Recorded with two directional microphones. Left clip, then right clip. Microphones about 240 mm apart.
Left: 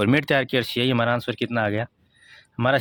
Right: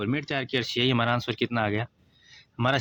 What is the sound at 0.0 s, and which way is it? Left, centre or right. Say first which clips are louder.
Speech: left 9 dB; left.